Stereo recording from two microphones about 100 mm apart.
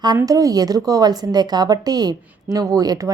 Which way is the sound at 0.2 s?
35° right (ahead or behind).